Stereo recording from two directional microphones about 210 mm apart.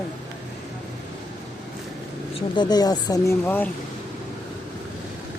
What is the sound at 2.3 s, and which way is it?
Speech, 20° left (ahead or behind).